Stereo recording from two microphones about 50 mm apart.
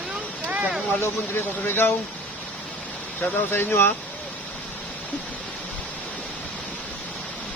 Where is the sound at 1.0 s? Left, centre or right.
Left.